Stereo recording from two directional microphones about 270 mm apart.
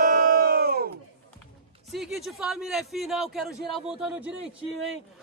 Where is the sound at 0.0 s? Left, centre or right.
Right.